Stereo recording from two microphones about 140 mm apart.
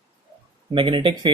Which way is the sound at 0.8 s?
35° right (ahead or behind).